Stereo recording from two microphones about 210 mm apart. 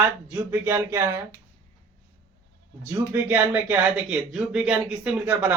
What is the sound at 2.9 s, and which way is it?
Speech, 10° right (ahead or behind).